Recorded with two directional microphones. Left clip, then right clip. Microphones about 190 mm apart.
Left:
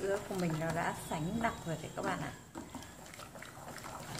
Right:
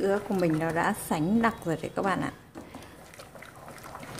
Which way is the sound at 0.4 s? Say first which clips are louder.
Right 10 dB; 50° right (ahead or behind).